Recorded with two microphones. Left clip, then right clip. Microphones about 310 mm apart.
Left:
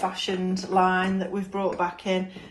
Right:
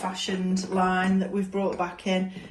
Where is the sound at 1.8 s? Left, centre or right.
Left.